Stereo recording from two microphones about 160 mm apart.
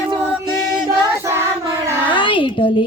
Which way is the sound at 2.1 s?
30° left (ahead or behind).